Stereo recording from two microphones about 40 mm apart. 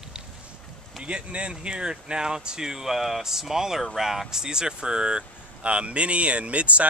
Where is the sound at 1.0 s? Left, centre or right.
Right.